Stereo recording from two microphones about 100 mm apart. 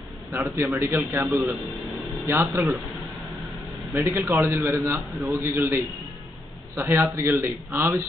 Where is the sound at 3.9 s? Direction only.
25° right (ahead or behind).